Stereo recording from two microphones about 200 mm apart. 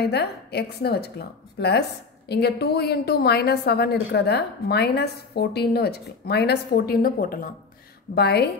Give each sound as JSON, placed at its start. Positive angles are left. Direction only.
{"t": 0.0, "sound": "a woman's voice", "side_deg": 55}